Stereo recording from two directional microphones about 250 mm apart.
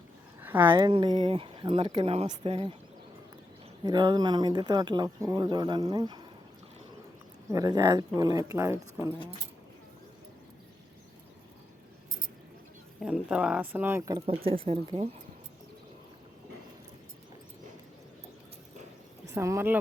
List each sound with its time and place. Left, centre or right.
0.4 s a sound: centre
0.7 s speech: centre
3.8 s speech: centre
7.5 s speech: centre
13.0 s speech: centre; by 15.0 s right
19.3 s speech: centre